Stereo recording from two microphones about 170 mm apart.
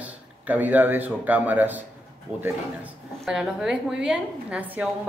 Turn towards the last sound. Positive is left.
turn(degrees=-5)  # may be behind; listen again after turning